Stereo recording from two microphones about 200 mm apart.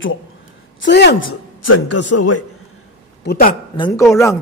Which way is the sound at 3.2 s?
45° left (ahead or behind).